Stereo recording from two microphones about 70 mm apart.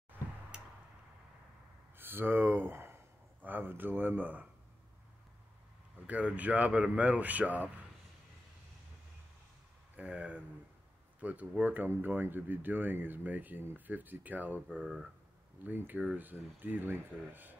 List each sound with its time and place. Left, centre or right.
0.5 s tick-tock: centre
2.0 s a sound: right
3.4 s speech: right
6.0 s speech: right
9.9 s speech: centre